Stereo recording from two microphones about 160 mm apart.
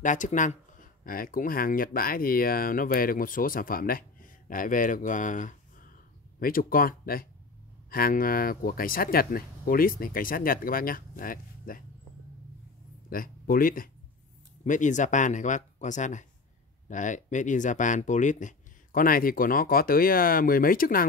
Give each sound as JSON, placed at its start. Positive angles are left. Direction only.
{"t": 0.0, "sound": "speech", "side_deg": 50}
{"t": 6.4, "sound": "speech", "side_deg": 65}
{"t": 13.1, "sound": "speech", "side_deg": 60}
{"t": 14.6, "sound": "speech", "side_deg": 50}